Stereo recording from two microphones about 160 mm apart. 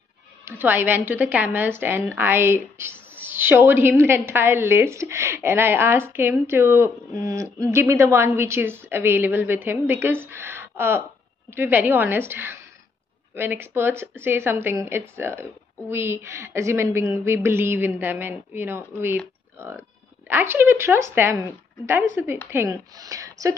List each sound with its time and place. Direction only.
0.5 s a woman's voice: 10° right (ahead or behind)